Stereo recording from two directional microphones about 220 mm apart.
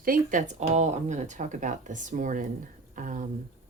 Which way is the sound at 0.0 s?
40° right (ahead or behind).